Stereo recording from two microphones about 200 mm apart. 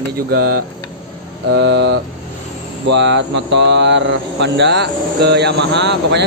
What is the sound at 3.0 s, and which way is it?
Speech, 60° right (ahead or behind).